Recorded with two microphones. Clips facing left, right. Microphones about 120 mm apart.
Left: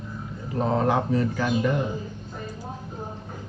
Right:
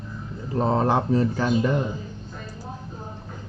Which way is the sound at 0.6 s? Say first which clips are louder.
Right 1 dB; 35° right (ahead or behind).